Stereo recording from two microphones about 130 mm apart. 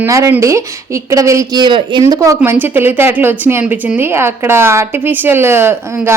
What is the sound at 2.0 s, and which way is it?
A woman's voice, 25° right (ahead or behind).